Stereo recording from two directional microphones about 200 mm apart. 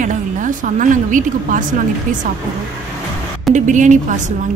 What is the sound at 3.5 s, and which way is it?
Speech, 40° right (ahead or behind).